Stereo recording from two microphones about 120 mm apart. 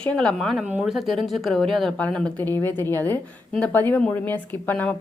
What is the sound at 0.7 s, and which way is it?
Speech, 10° right (ahead or behind).